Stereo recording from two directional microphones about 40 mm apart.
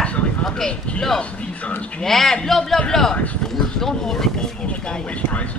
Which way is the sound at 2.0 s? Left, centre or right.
Centre.